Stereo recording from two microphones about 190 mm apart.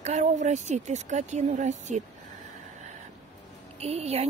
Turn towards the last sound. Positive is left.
turn(degrees=-35)  # may be behind; listen again after turning